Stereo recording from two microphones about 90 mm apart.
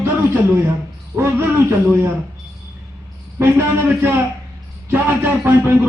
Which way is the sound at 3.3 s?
25° right (ahead or behind).